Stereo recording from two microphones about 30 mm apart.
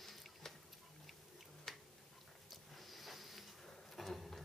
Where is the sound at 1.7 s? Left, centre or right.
Centre.